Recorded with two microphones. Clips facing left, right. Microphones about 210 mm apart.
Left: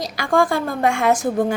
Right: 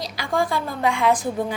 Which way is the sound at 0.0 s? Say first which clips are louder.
Left 5 dB; 50° left (ahead or behind).